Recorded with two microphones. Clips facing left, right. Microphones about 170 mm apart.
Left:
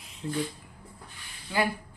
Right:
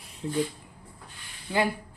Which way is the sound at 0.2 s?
25° right (ahead or behind).